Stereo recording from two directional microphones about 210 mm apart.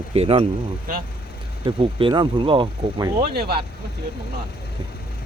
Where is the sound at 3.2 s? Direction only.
50° right (ahead or behind).